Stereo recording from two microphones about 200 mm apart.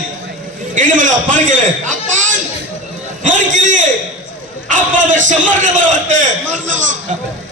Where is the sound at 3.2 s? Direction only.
40° right (ahead or behind).